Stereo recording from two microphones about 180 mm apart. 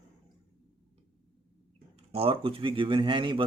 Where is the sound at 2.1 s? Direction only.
30° right (ahead or behind).